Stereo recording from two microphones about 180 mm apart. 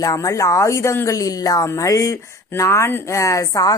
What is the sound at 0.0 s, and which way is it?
Speech, 20° left (ahead or behind).